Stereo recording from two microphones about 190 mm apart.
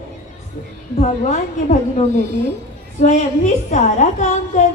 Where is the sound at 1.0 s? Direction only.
40° left (ahead or behind).